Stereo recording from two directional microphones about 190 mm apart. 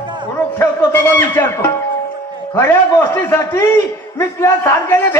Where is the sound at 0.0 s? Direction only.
25° right (ahead or behind).